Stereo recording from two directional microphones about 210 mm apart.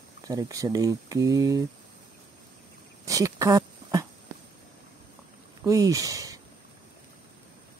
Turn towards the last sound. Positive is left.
turn(degrees=-15)  # may be behind; listen again after turning